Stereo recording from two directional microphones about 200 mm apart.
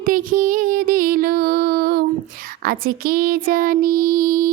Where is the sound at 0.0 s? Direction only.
40° right (ahead or behind).